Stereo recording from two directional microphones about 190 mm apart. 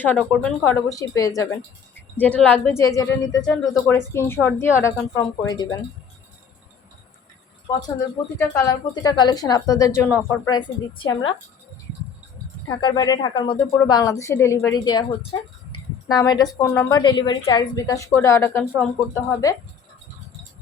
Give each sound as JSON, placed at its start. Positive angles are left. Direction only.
{"t": 0.0, "sound": "speech", "side_deg": 5}
{"t": 2.1, "sound": "a woman's voice", "side_deg": 5}
{"t": 8.4, "sound": "a woman's voice", "side_deg": 20}
{"t": 12.6, "sound": "a woman's voice", "side_deg": 20}
{"t": 18.6, "sound": "speech", "side_deg": -5}
{"t": 19.1, "sound": "speech", "side_deg": 15}